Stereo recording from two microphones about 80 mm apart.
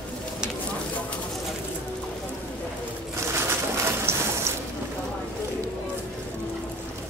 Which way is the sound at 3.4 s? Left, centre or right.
Right.